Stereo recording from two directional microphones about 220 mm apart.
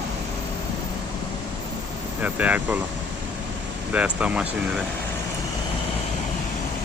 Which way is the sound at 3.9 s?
5° right (ahead or behind).